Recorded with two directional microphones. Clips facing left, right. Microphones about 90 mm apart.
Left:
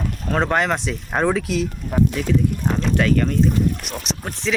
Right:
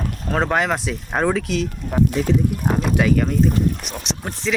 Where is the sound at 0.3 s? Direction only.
Centre (ahead or behind).